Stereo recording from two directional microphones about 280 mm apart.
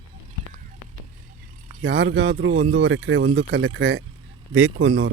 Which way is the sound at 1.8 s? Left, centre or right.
Right.